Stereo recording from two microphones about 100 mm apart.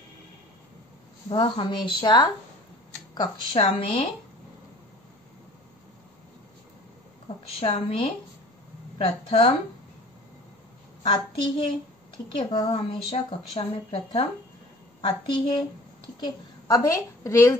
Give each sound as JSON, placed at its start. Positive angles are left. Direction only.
{"t": 1.3, "sound": "speech", "side_deg": 55}
{"t": 3.5, "sound": "a woman's voice", "side_deg": 65}
{"t": 7.4, "sound": "a woman's voice", "side_deg": 70}
{"t": 11.0, "sound": "a woman's voice", "side_deg": 60}
{"t": 16.6, "sound": "a woman's voice", "side_deg": 35}